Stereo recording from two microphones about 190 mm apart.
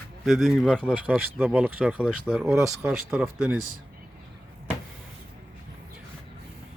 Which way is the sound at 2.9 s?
5° right (ahead or behind).